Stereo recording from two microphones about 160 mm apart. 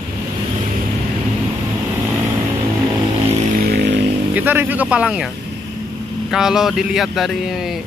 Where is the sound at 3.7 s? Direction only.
90° right.